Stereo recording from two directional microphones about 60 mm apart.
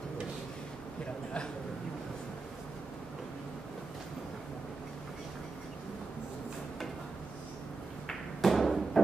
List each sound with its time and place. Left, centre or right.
8.1 s thump: centre